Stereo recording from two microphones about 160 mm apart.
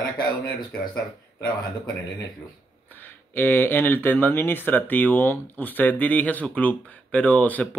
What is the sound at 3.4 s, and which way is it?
Speech, 15° left (ahead or behind).